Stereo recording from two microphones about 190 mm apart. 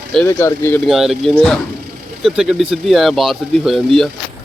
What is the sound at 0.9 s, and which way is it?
Speech, centre (ahead or behind).